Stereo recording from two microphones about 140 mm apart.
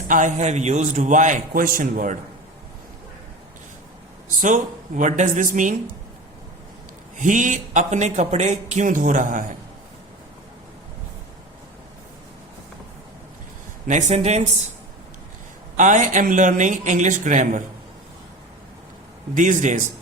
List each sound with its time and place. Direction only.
0.1 s speech: 65° right (ahead or behind)
4.4 s speech: 65° right (ahead or behind)
7.2 s speech: 65° right (ahead or behind)
13.8 s speech: 60° right (ahead or behind)
15.8 s speech: 65° right (ahead or behind)
19.3 s speech: 65° right (ahead or behind)